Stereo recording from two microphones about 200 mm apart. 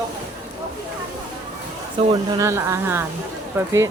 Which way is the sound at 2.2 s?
15° right (ahead or behind).